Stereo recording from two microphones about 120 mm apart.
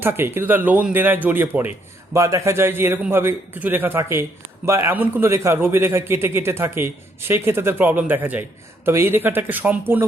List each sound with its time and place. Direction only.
0.0 s a man's voice: 20° right (ahead or behind)